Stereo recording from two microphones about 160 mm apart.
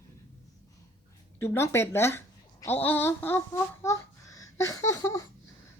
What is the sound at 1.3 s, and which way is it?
A child's voice, 15° left (ahead or behind).